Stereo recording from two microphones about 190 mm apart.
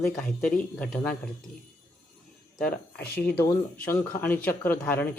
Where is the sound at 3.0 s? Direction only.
55° left (ahead or behind).